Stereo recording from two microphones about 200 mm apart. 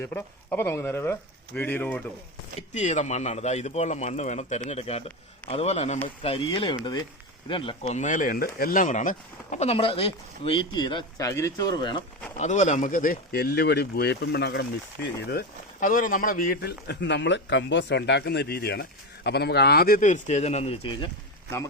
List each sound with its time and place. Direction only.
0.0 s speech: 10° left (ahead or behind)
2.6 s speech: 35° left (ahead or behind)
12.4 s speech: 35° left (ahead or behind)